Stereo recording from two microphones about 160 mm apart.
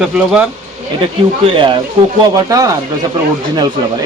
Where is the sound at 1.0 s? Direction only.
30° right (ahead or behind).